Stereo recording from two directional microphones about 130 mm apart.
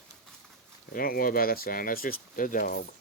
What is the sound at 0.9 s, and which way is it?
Speech, 90° left.